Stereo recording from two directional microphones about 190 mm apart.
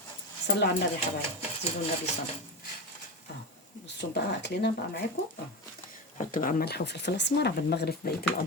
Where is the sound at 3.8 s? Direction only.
65° left (ahead or behind).